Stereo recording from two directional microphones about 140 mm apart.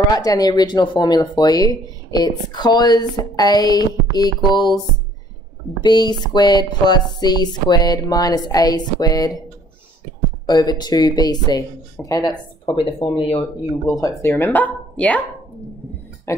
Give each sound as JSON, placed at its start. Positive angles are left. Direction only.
{"t": 0.1, "sound": "speech", "side_deg": 25}
{"t": 5.8, "sound": "speech", "side_deg": 30}
{"t": 10.4, "sound": "speech", "side_deg": 30}
{"t": 12.6, "sound": "speech", "side_deg": 35}
{"t": 13.9, "sound": "speech", "side_deg": 25}
{"t": 16.3, "sound": "a sound", "side_deg": 20}